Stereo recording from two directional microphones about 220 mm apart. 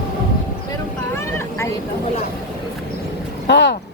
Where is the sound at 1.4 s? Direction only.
10° left (ahead or behind).